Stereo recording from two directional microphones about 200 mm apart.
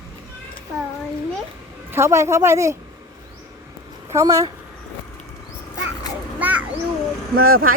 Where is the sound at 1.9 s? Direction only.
15° right (ahead or behind).